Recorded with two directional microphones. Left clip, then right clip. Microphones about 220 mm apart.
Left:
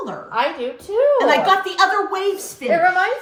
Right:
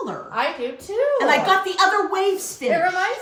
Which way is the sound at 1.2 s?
Centre (ahead or behind).